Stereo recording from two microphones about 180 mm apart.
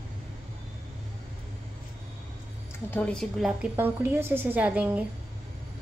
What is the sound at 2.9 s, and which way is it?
Speech, 5° left (ahead or behind).